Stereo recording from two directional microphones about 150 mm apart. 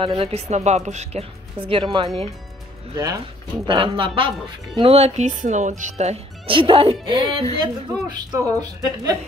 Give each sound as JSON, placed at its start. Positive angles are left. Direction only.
{"t": 0.0, "sound": "speech", "side_deg": -35}
{"t": 3.6, "sound": "a woman's voice", "side_deg": -35}